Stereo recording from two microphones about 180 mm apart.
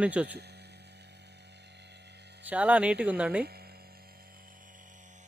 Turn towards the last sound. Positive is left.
turn(degrees=-5)  # may be behind; listen again after turning